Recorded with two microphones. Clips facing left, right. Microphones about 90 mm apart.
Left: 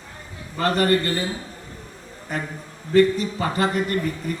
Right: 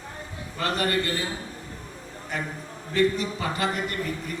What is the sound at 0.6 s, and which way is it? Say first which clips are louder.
Speech: left 6 dB; 45° left (ahead or behind).